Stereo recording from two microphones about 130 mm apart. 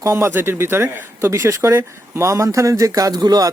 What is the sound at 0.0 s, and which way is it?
A woman's voice, 20° right (ahead or behind).